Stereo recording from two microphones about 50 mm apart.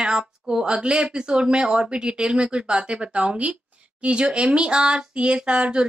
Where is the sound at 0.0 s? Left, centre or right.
Centre.